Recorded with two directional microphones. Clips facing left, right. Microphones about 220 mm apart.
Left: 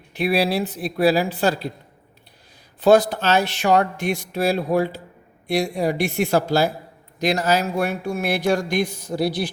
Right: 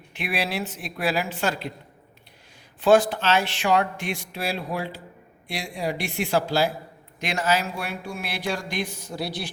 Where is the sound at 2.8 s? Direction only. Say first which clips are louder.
Left 3 dB; 40° left (ahead or behind).